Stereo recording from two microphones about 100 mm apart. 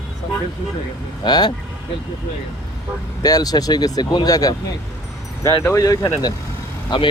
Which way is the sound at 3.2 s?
40° left (ahead or behind).